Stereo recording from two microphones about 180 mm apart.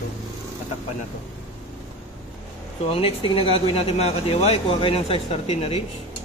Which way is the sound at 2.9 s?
30° left (ahead or behind).